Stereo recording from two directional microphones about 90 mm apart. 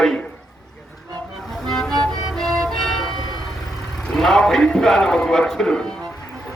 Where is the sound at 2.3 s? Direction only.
5° left (ahead or behind).